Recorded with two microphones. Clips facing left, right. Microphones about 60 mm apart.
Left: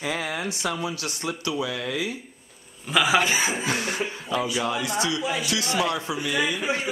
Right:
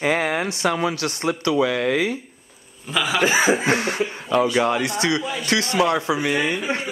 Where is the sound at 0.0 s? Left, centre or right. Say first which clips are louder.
Right 7 dB; right.